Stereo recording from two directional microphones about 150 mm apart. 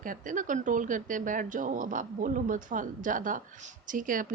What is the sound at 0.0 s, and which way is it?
Speech, 60° right (ahead or behind).